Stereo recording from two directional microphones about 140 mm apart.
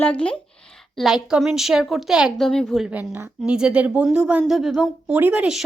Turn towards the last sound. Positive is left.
turn(degrees=-5)  # may be behind; listen again after turning